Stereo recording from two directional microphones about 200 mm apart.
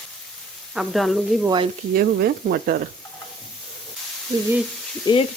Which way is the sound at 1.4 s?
25° right (ahead or behind).